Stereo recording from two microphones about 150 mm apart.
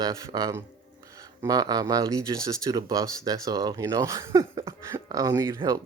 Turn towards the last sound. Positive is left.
turn(degrees=-25)  # may be behind; listen again after turning